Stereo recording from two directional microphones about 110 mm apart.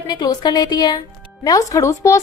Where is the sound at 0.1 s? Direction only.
40° left (ahead or behind).